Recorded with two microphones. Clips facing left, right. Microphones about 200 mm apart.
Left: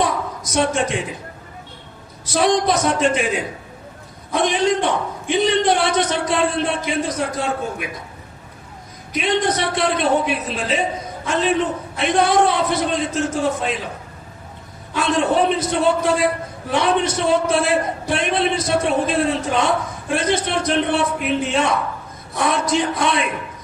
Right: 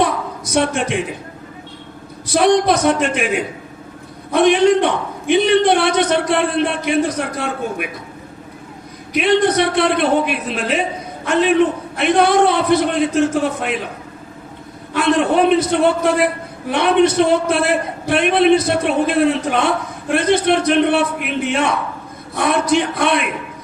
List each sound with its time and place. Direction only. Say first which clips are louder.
0.0 s a sound: right 3 dB; 60° right (ahead or behind)
2.2 s a man's voice: right 4 dB; 60° right (ahead or behind)
9.1 s a man's voice: right 5 dB; 60° right (ahead or behind)
14.9 s a man's voice: right 3 dB; 60° right (ahead or behind)